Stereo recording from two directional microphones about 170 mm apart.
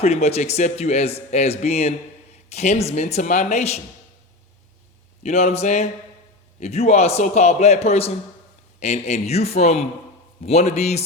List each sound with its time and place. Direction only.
0.0 s a man's voice: 40° left (ahead or behind)
5.2 s a man's voice: 40° left (ahead or behind)